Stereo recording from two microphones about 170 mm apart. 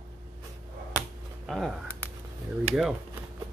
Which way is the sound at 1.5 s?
Centre (ahead or behind).